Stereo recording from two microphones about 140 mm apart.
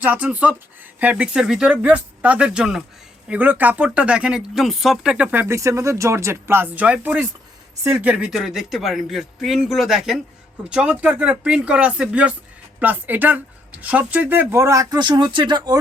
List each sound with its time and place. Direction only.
0.0 s a man's voice: 10° right (ahead or behind); by 15.8 s 30° right (ahead or behind)